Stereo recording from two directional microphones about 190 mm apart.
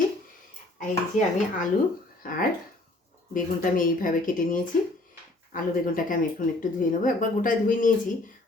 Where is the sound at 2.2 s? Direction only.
50° left (ahead or behind).